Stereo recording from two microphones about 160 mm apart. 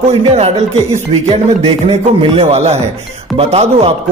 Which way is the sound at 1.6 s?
35° right (ahead or behind).